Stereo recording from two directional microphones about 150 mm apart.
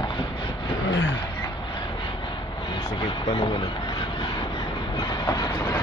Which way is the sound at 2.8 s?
30° left (ahead or behind).